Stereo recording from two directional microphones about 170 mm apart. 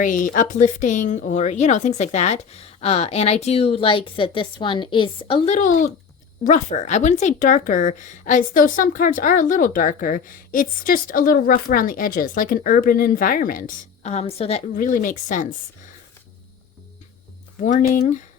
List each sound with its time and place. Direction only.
0.0 s a woman's voice: 50° left (ahead or behind); by 5.5 s 30° left (ahead or behind)
5.5 s speech: 50° left (ahead or behind)
14.8 s speech: 50° left (ahead or behind)
17.6 s speech: 50° left (ahead or behind)